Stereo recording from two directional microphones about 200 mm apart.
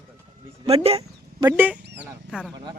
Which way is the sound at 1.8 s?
60° right (ahead or behind).